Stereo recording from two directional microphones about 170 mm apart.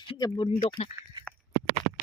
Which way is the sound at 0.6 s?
35° left (ahead or behind).